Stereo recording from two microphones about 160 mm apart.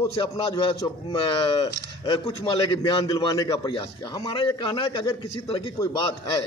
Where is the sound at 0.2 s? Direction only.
35° left (ahead or behind).